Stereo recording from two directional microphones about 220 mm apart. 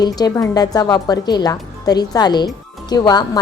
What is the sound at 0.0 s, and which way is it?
A woman's voice, 15° left (ahead or behind).